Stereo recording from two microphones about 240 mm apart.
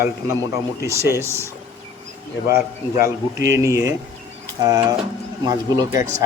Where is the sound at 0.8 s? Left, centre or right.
Centre.